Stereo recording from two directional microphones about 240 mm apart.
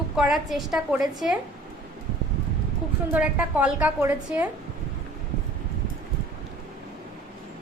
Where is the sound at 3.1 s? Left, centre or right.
Centre.